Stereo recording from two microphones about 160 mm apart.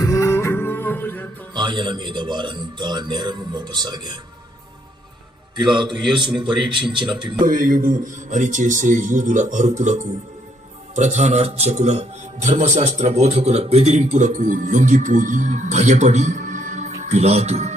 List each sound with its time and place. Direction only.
0.0 s music: 20° left (ahead or behind)
1.5 s a man's voice: 30° right (ahead or behind)
5.5 s a man's voice: 30° right (ahead or behind)
7.4 s a man's voice: 55° right (ahead or behind)